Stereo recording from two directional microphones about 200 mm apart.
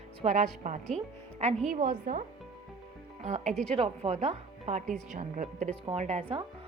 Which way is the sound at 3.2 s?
35° right (ahead or behind).